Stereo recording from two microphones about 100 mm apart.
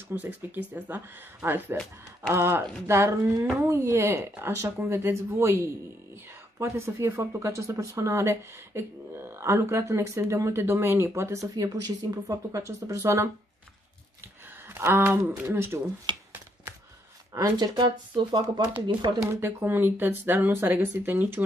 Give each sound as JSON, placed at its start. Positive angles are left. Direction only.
{"t": 0.1, "sound": "speech", "side_deg": -15}
{"t": 14.7, "sound": "speech", "side_deg": -20}
{"t": 16.1, "sound": "a sound", "side_deg": -50}
{"t": 17.3, "sound": "speech", "side_deg": -40}
{"t": 19.2, "sound": "speech", "side_deg": -20}